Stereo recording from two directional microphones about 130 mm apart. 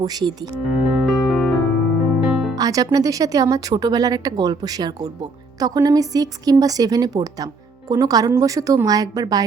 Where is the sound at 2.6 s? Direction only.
30° right (ahead or behind).